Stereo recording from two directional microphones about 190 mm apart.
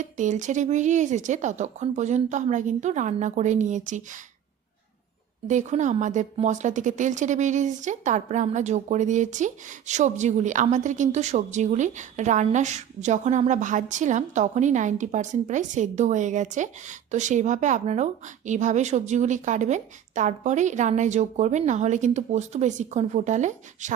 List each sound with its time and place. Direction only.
0.0 s speech: 40° right (ahead or behind)
5.5 s speech: 40° right (ahead or behind)